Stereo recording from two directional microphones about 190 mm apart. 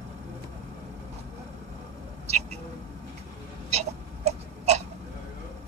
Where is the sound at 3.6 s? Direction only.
35° right (ahead or behind).